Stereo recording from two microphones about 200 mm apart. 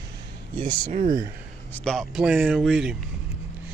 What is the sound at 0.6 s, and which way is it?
Speech, 40° right (ahead or behind).